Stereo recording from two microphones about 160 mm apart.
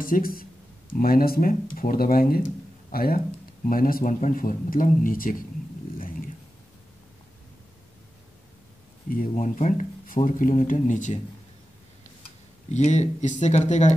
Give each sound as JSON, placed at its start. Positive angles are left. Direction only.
{"t": 0.0, "sound": "speech", "side_deg": 65}
{"t": 9.3, "sound": "speech", "side_deg": 50}
{"t": 12.7, "sound": "speech", "side_deg": 45}